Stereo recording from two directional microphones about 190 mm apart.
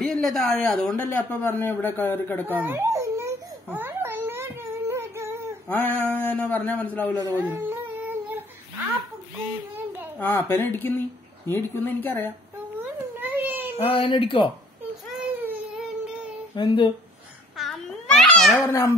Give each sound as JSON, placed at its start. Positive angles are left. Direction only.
{"t": 0.0, "sound": "speech", "side_deg": 0}
{"t": 2.4, "sound": "a sound", "side_deg": -10}
{"t": 5.7, "sound": "speech", "side_deg": 10}
{"t": 7.2, "sound": "speech", "side_deg": -20}
{"t": 7.4, "sound": "humming", "side_deg": -10}
{"t": 10.1, "sound": "speech", "side_deg": 10}
{"t": 13.2, "sound": "a sound", "side_deg": -10}
{"t": 13.8, "sound": "speech", "side_deg": 25}
{"t": 15.0, "sound": "baby cry", "side_deg": -5}
{"t": 16.5, "sound": "speech", "side_deg": 25}
{"t": 17.6, "sound": "babbling", "side_deg": 0}